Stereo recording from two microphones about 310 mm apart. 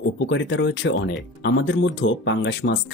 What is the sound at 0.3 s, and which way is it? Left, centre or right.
Speech, left.